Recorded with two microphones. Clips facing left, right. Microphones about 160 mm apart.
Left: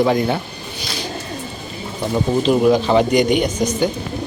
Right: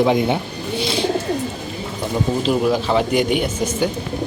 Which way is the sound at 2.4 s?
Centre (ahead or behind).